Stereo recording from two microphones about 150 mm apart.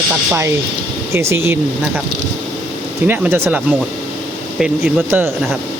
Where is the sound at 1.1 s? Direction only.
15° right (ahead or behind).